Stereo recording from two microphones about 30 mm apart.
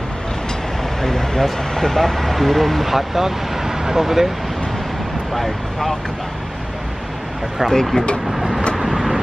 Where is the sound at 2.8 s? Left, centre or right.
Centre.